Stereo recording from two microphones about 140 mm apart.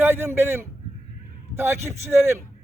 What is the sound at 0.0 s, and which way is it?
A man's voice, 15° right (ahead or behind).